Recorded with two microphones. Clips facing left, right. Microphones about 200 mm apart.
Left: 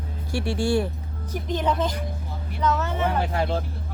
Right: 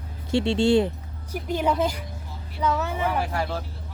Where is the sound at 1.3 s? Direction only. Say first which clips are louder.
Right 1 dB; 10° right (ahead or behind).